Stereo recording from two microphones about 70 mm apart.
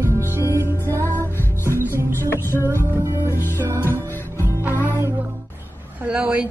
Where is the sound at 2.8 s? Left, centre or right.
Right.